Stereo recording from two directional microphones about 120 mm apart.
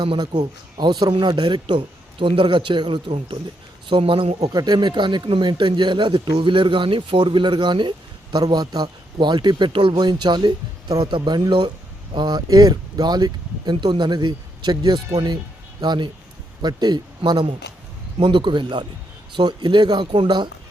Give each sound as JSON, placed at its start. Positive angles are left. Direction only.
{"t": 0.0, "sound": "speech", "side_deg": -40}
{"t": 4.4, "sound": "a man's voice", "side_deg": -35}